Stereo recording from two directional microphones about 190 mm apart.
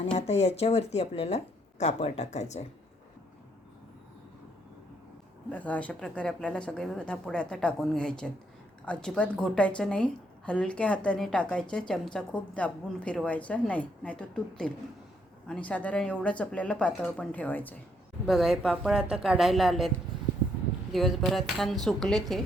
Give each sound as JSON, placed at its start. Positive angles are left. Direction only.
{"t": 0.0, "sound": "speech", "side_deg": 35}
{"t": 5.5, "sound": "a woman's voice", "side_deg": 10}
{"t": 18.3, "sound": "a woman's voice", "side_deg": 0}
{"t": 20.9, "sound": "a woman's voice", "side_deg": 0}